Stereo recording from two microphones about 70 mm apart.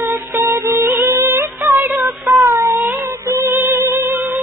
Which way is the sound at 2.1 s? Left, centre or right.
Centre.